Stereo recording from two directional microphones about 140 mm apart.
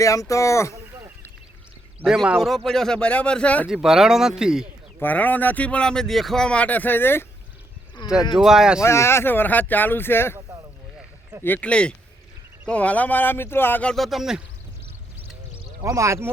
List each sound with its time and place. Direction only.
0.0 s speech: 25° left (ahead or behind)
2.0 s speech: 5° right (ahead or behind)
3.7 s speech: 5° right (ahead or behind)
4.9 s speech: 15° left (ahead or behind)
8.0 s speech: 30° left (ahead or behind)
8.4 s speech: 5° right (ahead or behind)
8.8 s speech: 20° left (ahead or behind)
11.4 s speech: 10° left (ahead or behind)
13.9 s speech: centre (ahead or behind)
15.8 s speech: 20° right (ahead or behind)